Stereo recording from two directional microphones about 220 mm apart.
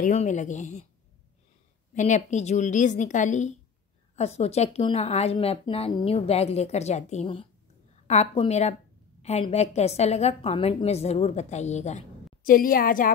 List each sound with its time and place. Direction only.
0.0 s a woman's voice: 35° left (ahead or behind)
2.0 s a woman's voice: 30° left (ahead or behind)